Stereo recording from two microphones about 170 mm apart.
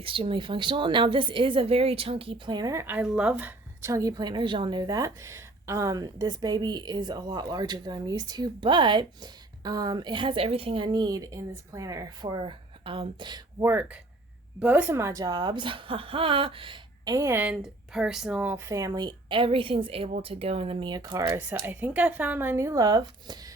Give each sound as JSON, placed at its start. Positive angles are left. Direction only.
{"t": 0.0, "sound": "a woman's voice", "side_deg": -30}
{"t": 13.6, "sound": "a woman's voice", "side_deg": -10}